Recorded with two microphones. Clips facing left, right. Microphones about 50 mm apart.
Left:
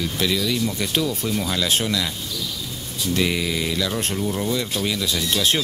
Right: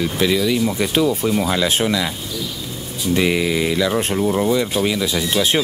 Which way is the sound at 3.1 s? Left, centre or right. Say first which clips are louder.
Right 5 dB; centre.